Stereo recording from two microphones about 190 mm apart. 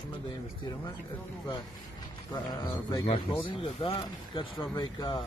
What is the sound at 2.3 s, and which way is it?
Speech, 20° left (ahead or behind).